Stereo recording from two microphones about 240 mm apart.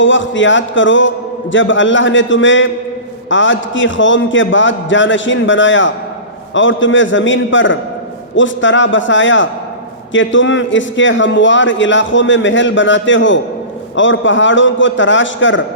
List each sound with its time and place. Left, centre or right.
0.0 s a man's voice: left